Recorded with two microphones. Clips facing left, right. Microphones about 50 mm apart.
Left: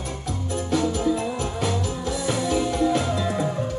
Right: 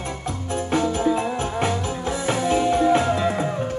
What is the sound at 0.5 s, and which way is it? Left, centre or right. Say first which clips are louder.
Music: right 2 dB; right.